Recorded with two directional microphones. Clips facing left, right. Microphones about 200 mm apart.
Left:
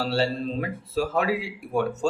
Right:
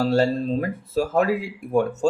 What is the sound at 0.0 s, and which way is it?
Speech, 45° right (ahead or behind).